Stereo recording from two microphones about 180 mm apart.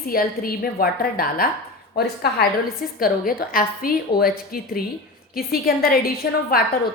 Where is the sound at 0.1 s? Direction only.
55° left (ahead or behind).